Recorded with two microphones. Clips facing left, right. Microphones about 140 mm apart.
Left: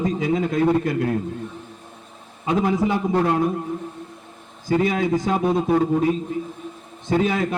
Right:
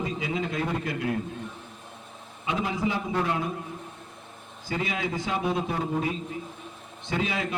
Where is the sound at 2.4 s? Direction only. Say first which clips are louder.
Left 8 dB; 45° left (ahead or behind).